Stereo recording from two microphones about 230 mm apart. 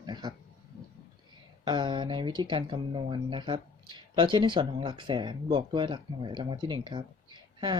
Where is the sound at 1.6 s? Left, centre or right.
Centre.